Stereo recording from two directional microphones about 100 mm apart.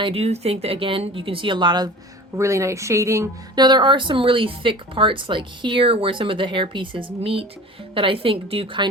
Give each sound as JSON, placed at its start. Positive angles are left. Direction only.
{"t": 0.0, "sound": "speech", "side_deg": -80}
{"t": 2.3, "sound": "speech", "side_deg": -30}
{"t": 3.5, "sound": "speech", "side_deg": -45}